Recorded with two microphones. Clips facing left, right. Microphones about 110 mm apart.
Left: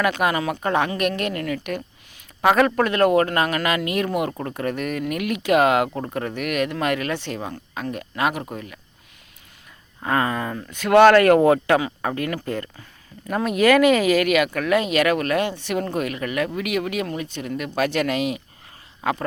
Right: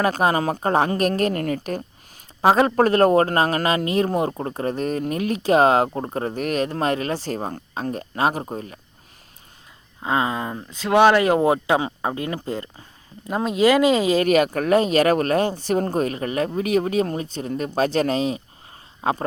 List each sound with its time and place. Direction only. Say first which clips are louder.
0.0 s speech: right 2 dB; 30° right (ahead or behind)
10.0 s speech: even; 20° right (ahead or behind)